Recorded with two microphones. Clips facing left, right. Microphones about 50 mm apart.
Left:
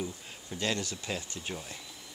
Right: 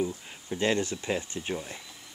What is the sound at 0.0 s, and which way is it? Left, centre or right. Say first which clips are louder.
Speech: right 7 dB; right.